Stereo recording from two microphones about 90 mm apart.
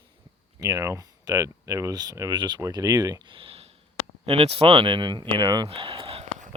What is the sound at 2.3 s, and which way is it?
Speech, 55° right (ahead or behind).